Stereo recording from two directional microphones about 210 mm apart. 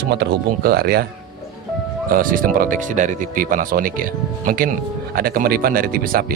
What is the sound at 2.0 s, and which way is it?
Speech, 40° right (ahead or behind).